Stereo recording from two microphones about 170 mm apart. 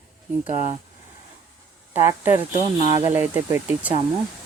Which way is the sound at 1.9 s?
15° right (ahead or behind).